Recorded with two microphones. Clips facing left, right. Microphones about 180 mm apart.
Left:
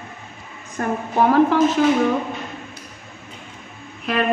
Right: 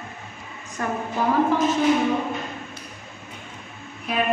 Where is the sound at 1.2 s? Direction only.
65° left (ahead or behind).